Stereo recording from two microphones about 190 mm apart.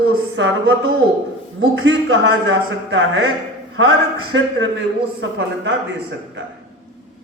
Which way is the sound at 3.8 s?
90° right.